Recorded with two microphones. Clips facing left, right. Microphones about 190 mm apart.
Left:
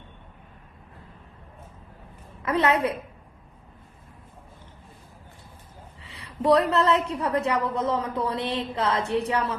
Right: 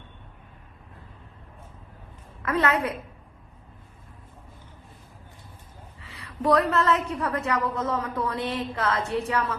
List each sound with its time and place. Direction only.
2.4 s a woman's voice: 20° left (ahead or behind)
6.2 s a woman's voice: 20° left (ahead or behind)